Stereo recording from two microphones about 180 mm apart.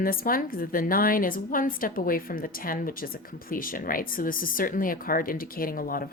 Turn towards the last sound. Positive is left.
turn(degrees=55)  # may be behind; listen again after turning